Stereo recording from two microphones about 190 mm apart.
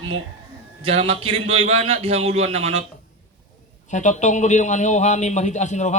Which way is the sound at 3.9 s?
40° left (ahead or behind).